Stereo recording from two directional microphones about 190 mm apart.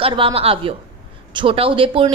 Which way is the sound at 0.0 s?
25° right (ahead or behind).